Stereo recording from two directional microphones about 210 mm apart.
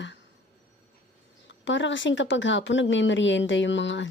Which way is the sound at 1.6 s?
60° left (ahead or behind).